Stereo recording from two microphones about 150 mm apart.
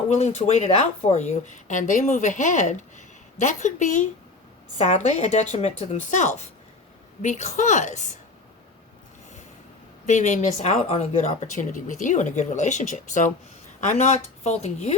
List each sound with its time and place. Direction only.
0.1 s speech: 45° left (ahead or behind)
10.1 s speech: 55° left (ahead or behind)